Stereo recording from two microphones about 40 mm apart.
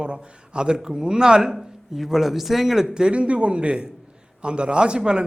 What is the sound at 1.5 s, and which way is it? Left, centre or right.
Speech, centre.